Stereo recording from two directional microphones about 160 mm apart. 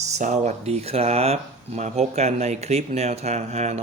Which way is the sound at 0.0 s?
50° right (ahead or behind).